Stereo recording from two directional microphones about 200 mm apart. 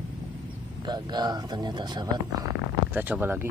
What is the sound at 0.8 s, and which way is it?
Speech, 20° right (ahead or behind).